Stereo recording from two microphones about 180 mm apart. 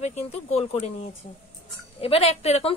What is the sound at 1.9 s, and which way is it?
Speech, 35° left (ahead or behind).